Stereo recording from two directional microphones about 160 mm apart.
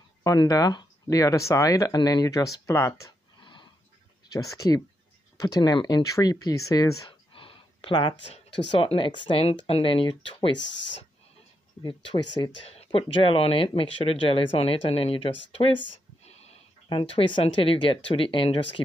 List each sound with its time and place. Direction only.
0.2 s speech: 25° left (ahead or behind)
3.3 s a sound: 30° left (ahead or behind)
4.3 s speech: 20° left (ahead or behind)
8.2 s speech: 90° left
8.8 s speech: 30° left (ahead or behind)
12.4 s speech: 35° left (ahead or behind)